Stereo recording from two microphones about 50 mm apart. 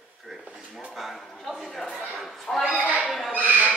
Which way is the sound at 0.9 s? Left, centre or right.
Centre.